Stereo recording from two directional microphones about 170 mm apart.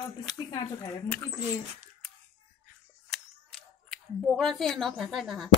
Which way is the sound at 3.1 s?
Centre (ahead or behind).